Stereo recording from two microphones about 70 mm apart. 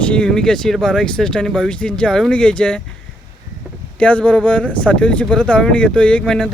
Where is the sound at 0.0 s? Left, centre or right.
Centre.